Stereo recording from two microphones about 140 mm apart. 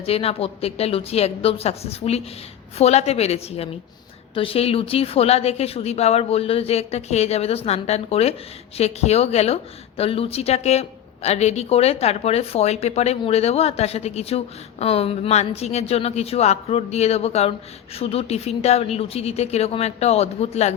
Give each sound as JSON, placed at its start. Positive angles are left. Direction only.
{"t": 0.0, "sound": "speech", "side_deg": 45}